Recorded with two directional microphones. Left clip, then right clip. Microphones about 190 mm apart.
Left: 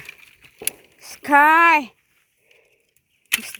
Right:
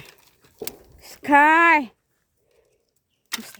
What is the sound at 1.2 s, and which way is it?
Speech, 15° right (ahead or behind).